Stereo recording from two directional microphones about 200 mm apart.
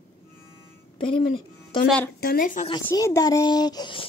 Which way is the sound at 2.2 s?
45° left (ahead or behind).